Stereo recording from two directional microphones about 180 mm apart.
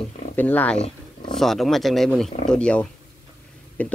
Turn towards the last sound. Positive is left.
turn(degrees=10)  # may be behind; listen again after turning